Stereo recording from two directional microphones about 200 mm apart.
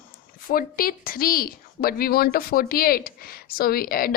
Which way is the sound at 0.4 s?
45° left (ahead or behind).